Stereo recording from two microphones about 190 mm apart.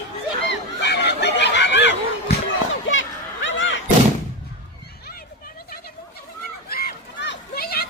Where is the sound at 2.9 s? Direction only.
80° left.